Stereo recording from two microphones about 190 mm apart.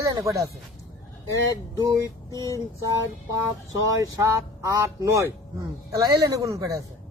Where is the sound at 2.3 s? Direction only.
15° left (ahead or behind).